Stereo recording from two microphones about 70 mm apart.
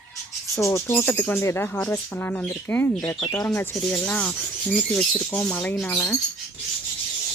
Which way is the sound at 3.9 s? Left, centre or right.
Centre.